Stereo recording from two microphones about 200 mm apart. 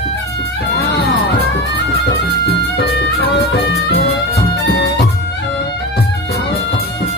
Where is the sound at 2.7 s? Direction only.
55° left (ahead or behind).